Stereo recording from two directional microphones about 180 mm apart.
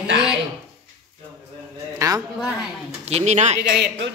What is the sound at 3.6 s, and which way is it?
Speech, 65° right (ahead or behind).